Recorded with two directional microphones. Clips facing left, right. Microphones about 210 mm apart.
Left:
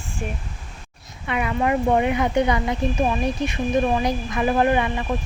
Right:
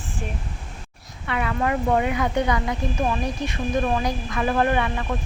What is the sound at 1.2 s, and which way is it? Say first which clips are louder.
Speech: left 2 dB; 15° left (ahead or behind).